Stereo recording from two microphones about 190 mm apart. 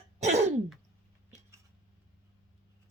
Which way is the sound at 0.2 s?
35° right (ahead or behind).